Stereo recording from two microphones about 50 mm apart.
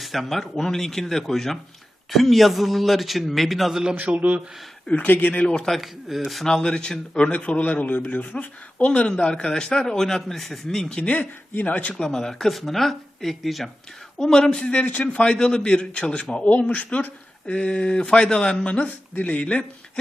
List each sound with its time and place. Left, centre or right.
0.0 s speech: centre
3.7 s speech: centre
3.9 s speech: right
4.9 s a man's voice: left
5.6 s speech: centre
6.4 s a man's voice: centre
8.9 s a man's voice: centre
10.8 s speech: centre
11.1 s a man's voice: left
11.9 s a man's voice: centre
14.7 s speech: left
16.5 s a man's voice: left
17.4 s a man's voice: left